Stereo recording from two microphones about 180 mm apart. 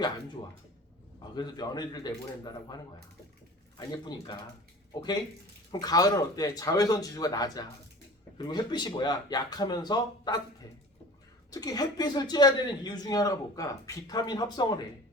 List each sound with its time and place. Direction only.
1.4 s speech: 20° left (ahead or behind)
5.7 s speech: 20° left (ahead or behind)
11.5 s speech: 20° left (ahead or behind)